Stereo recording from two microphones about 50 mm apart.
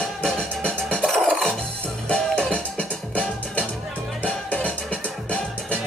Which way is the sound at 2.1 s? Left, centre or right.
Centre.